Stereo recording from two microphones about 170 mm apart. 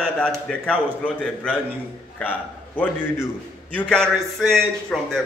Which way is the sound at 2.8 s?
10° left (ahead or behind).